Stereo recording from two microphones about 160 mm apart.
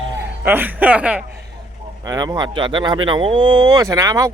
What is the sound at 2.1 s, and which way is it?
Speech, 25° right (ahead or behind).